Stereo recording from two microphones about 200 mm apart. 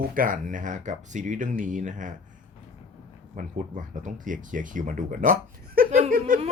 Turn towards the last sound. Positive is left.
turn(degrees=-40)  # may be behind; listen again after turning